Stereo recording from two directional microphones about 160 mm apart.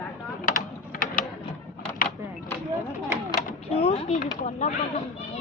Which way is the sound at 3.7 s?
40° left (ahead or behind).